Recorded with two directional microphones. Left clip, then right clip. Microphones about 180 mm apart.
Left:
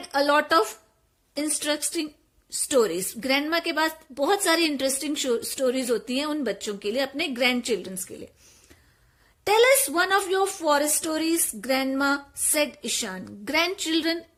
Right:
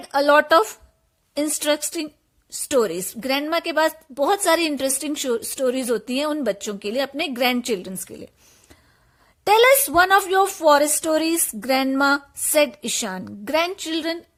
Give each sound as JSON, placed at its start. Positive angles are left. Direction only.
{"t": 0.0, "sound": "a woman's voice", "side_deg": -30}
{"t": 9.5, "sound": "a woman's voice", "side_deg": -40}